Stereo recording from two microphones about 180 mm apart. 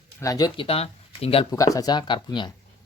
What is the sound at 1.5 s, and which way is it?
Speech, 20° left (ahead or behind).